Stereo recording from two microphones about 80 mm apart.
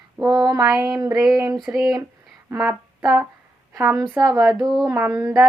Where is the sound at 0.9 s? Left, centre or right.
Right.